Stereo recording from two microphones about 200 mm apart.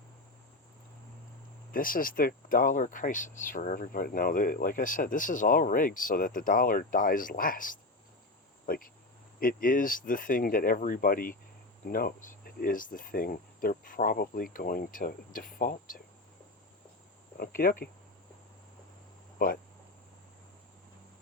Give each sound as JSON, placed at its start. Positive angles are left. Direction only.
{"t": 1.7, "sound": "speech", "side_deg": 45}
{"t": 17.3, "sound": "speech", "side_deg": 45}
{"t": 19.4, "sound": "speech", "side_deg": 45}